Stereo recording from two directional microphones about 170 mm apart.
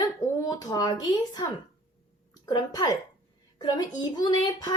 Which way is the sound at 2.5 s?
25° left (ahead or behind).